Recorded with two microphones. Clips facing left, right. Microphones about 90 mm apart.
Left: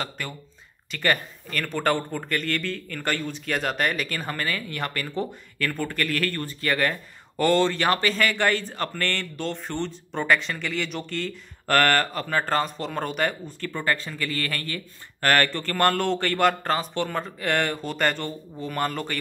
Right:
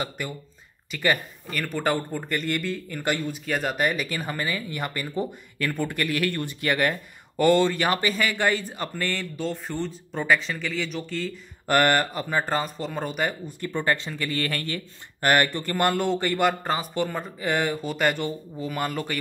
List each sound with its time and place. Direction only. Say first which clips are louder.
0.9 s speech: even; 10° right (ahead or behind)
13.7 s speech: right 1 dB; 20° right (ahead or behind)
15.2 s speech: even; 15° right (ahead or behind)